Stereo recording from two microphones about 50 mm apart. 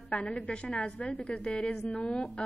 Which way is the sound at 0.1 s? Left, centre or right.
Left.